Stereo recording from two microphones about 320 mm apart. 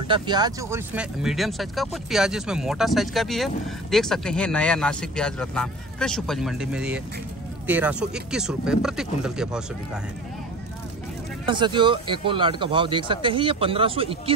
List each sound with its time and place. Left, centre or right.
0.1 s speech: centre
11.4 s speech: centre